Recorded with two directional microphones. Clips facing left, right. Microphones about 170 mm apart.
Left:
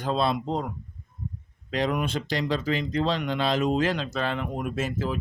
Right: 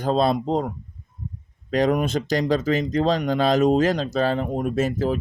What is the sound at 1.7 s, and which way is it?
Speech, 45° right (ahead or behind).